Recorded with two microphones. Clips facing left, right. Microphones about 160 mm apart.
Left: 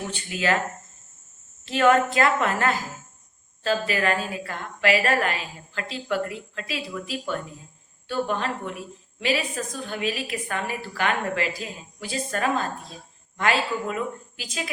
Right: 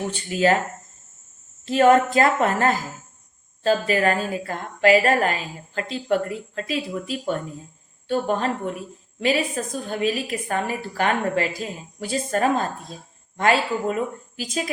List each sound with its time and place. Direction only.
0.1 s a woman's voice: 40° right (ahead or behind)
1.6 s a woman's voice: 40° right (ahead or behind)